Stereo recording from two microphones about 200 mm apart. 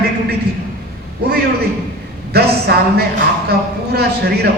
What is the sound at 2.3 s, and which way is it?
Speech, 50° right (ahead or behind).